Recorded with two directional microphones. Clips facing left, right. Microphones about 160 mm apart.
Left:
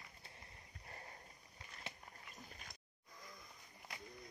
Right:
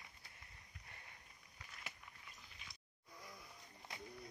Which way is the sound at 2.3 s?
45° left (ahead or behind).